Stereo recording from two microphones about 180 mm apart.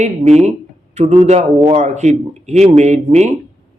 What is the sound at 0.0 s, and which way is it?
A man's voice, 40° right (ahead or behind).